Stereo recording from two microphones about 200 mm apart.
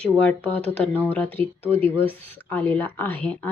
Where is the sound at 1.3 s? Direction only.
30° right (ahead or behind).